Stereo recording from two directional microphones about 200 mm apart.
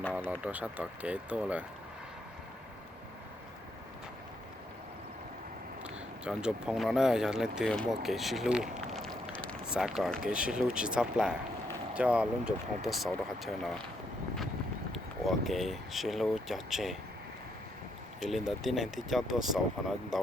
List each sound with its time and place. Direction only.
0.0 s run: 10° left (ahead or behind)
0.3 s speech: 5° right (ahead or behind)
5.8 s speech: 5° right (ahead or behind)
14.9 s speech: centre (ahead or behind)
18.2 s speech: centre (ahead or behind)